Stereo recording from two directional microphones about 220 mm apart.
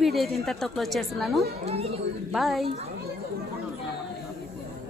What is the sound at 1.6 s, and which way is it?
Speech, 30° right (ahead or behind).